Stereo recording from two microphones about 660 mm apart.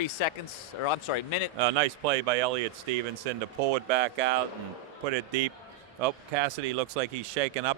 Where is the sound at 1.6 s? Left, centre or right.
Right.